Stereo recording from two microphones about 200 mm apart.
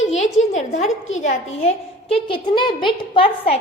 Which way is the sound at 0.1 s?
35° left (ahead or behind).